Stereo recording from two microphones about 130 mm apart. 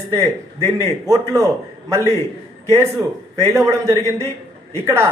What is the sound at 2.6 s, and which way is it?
Speech, 20° right (ahead or behind).